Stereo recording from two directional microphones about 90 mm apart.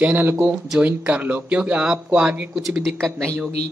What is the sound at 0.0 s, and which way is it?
Speech, 20° right (ahead or behind).